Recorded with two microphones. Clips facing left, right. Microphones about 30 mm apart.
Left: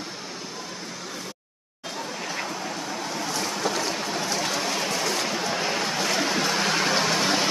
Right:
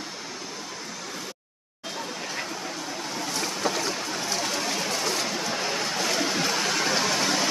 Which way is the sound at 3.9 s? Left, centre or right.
Centre.